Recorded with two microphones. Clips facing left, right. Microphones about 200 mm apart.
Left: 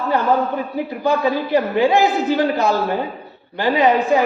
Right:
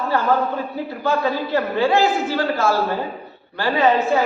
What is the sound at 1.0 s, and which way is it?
A man's voice, 15° left (ahead or behind).